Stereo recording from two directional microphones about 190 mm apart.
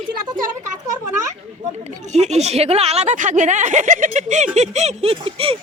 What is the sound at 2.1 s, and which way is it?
Speech, 35° right (ahead or behind).